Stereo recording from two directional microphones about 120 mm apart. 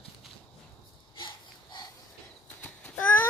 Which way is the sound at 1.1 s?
40° left (ahead or behind).